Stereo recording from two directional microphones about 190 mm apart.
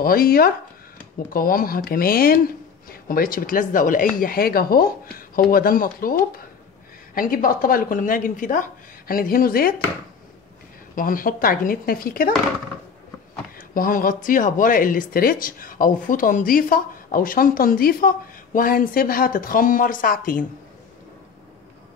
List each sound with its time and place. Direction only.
0.0 s speech: 50° left (ahead or behind)
11.0 s speech: 45° left (ahead or behind)
13.6 s speech: 45° left (ahead or behind)